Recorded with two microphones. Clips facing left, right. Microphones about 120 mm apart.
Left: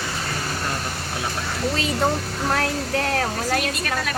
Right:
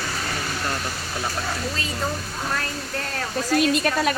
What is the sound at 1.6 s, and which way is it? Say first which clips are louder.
Speech: left 6 dB; 70° left (ahead or behind).